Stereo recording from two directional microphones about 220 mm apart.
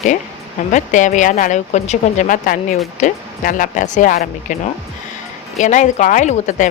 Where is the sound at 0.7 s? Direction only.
35° left (ahead or behind).